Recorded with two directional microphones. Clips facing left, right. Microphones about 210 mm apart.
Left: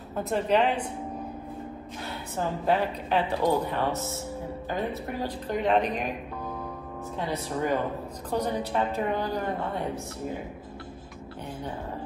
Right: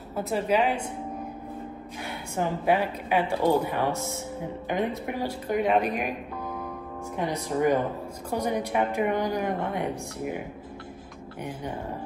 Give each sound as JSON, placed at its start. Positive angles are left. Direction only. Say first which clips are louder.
{"t": 0.3, "sound": "a woman's voice", "louder": "even", "side_deg": -5}
{"t": 2.0, "sound": "speech", "louder": "right 2 dB", "side_deg": -10}
{"t": 7.2, "sound": "speech", "louder": "right 3 dB", "side_deg": -15}